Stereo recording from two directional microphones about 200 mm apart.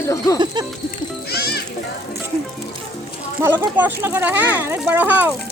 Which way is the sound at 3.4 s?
10° right (ahead or behind).